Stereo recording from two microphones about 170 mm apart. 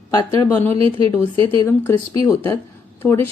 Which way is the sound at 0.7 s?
35° right (ahead or behind).